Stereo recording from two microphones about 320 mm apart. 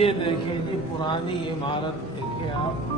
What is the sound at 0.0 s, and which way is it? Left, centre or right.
Speech, centre.